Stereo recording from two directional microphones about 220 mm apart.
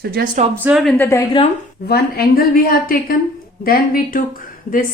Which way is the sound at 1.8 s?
45° left (ahead or behind).